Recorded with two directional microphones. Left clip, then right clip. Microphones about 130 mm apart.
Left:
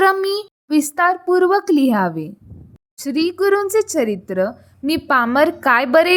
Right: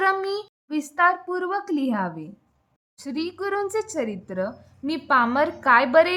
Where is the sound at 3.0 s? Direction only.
35° left (ahead or behind).